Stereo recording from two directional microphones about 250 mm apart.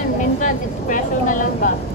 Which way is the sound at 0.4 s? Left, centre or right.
Left.